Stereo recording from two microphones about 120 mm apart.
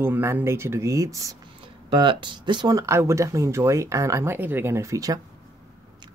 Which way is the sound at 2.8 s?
25° right (ahead or behind).